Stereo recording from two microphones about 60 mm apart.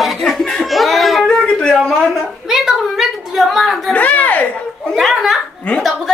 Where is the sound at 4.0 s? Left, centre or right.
Left.